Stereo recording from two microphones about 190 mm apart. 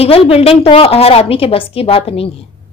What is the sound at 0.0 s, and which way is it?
A woman's voice, 30° left (ahead or behind).